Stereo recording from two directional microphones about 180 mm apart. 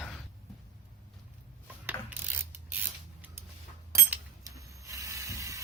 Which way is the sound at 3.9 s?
15° right (ahead or behind).